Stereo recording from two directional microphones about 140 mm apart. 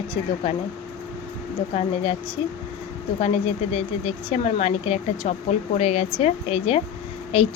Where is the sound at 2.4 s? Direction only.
40° left (ahead or behind).